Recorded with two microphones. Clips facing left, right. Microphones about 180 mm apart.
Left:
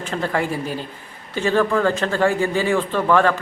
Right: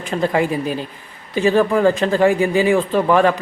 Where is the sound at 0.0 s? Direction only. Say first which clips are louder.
Right 4 dB; 15° right (ahead or behind).